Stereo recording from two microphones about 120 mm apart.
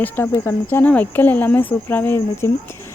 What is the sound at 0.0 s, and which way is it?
Speech, 20° left (ahead or behind).